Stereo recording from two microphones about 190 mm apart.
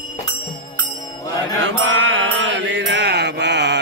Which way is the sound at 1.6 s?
85° right.